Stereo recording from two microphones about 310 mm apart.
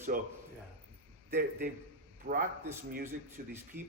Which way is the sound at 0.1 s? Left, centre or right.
Right.